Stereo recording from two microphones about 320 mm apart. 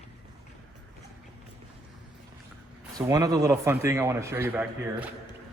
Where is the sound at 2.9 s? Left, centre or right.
Centre.